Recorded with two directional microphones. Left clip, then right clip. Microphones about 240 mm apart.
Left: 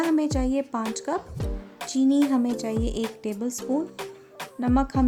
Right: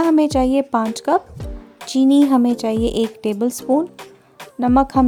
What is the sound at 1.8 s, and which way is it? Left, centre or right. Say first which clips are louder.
Speech: right 8 dB; right.